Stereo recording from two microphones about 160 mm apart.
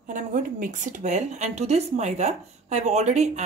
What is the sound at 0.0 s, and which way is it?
A woman's voice, 55° right (ahead or behind).